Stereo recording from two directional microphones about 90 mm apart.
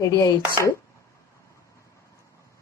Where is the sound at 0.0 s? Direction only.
45° left (ahead or behind).